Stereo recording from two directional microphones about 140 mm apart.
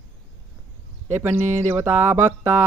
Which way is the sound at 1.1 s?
15° right (ahead or behind).